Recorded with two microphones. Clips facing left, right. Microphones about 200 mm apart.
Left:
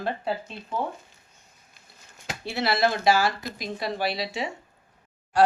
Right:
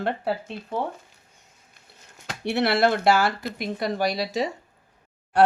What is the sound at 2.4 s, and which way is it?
Speech, 65° right (ahead or behind).